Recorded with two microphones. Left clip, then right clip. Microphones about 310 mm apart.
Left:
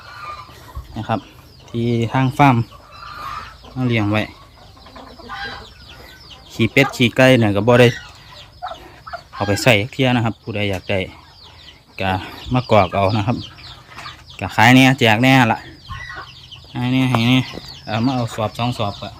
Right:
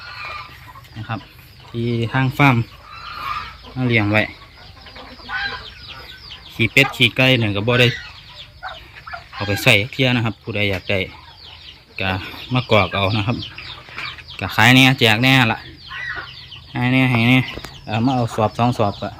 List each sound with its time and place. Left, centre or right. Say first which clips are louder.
1.7 s speech: left 2 dB; centre
3.8 s speech: right 2 dB; centre
6.6 s speech: right 1 dB; centre
9.4 s speech: even; centre
14.3 s speech: left 1 dB; centre
16.7 s speech: right 2 dB; centre